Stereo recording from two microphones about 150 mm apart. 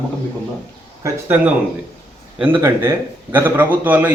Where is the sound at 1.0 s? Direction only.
15° right (ahead or behind).